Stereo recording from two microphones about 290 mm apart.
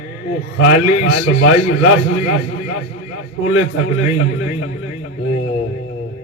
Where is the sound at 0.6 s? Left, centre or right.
Left.